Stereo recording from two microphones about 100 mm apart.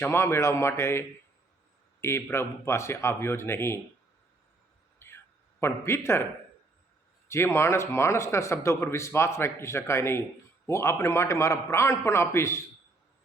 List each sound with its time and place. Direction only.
0.0 s a man's voice: 25° left (ahead or behind)
4.9 s a sound: 25° left (ahead or behind)
7.3 s a man's voice: 25° left (ahead or behind)